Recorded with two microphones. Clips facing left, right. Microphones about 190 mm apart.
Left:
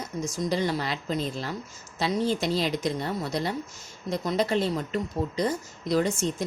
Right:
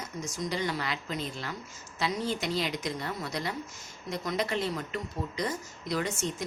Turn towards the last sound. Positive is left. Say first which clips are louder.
# left 7 dB
turn(degrees=30)  # may be behind; listen again after turning